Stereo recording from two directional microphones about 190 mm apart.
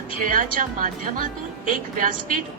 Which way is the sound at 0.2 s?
45° right (ahead or behind).